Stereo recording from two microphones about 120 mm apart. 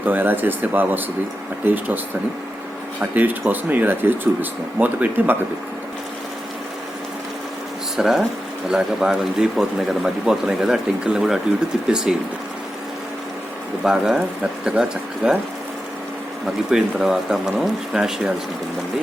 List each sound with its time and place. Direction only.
0.0 s speech: 15° right (ahead or behind)
3.0 s speech: 15° right (ahead or behind)
7.9 s speech: 5° right (ahead or behind)
13.8 s speech: 5° right (ahead or behind)
16.6 s speech: 5° right (ahead or behind)